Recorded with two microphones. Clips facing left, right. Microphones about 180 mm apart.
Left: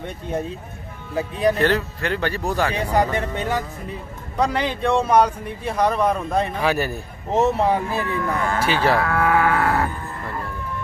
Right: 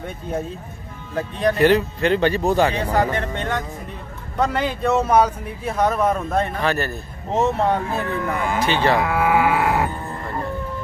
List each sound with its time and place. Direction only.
0.0 s a man's voice: centre (ahead or behind)
1.6 s speech: 20° right (ahead or behind)
2.7 s a man's voice: 15° left (ahead or behind)
8.3 s speech: 15° right (ahead or behind)
8.6 s speech: 5° left (ahead or behind)
8.9 s speech: 15° right (ahead or behind)